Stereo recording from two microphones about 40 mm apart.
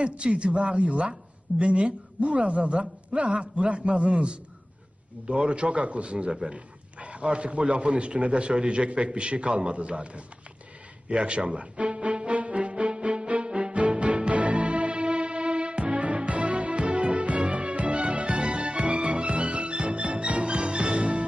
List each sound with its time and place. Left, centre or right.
0.0 s a man's voice: right
11.1 s music: right